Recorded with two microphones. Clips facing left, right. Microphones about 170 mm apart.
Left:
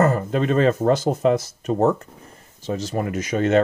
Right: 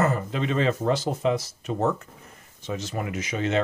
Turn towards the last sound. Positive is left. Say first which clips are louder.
# left 7 dB
turn(degrees=50)  # may be behind; listen again after turning